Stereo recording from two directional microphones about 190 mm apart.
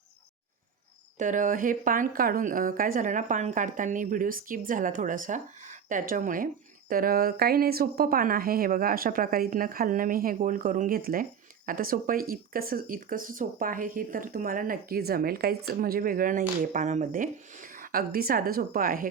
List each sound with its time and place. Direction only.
1.2 s speech: 45° right (ahead or behind)